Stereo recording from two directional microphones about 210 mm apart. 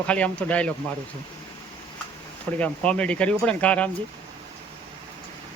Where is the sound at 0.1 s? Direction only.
5° left (ahead or behind).